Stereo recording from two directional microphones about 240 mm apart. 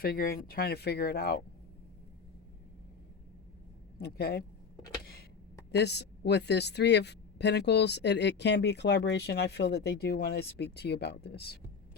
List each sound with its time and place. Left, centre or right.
0.0 s speech: left
4.0 s speech: left
5.7 s a woman's voice: left